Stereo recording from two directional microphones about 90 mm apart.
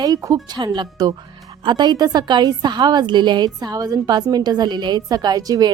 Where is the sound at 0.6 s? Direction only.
50° right (ahead or behind).